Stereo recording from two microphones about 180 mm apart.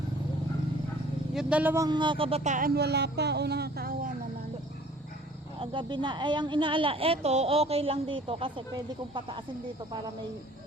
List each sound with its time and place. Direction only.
1.3 s speech: 5° right (ahead or behind); by 4.1 s 55° right (ahead or behind)
5.5 s a woman's voice: 25° right (ahead or behind)